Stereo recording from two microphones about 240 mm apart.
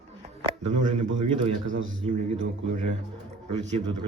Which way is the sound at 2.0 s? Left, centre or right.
Right.